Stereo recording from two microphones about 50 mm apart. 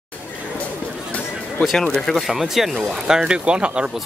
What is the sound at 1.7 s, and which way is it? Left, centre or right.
Speech, centre.